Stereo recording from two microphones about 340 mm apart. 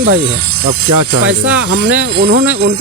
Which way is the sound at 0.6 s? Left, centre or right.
Right.